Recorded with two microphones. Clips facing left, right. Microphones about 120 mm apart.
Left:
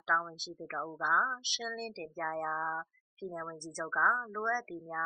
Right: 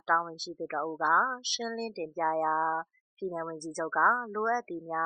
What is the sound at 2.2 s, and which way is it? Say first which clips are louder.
Speech: right 8 dB; 40° right (ahead or behind).